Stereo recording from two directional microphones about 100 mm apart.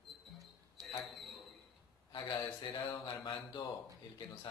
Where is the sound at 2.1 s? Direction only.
55° left (ahead or behind).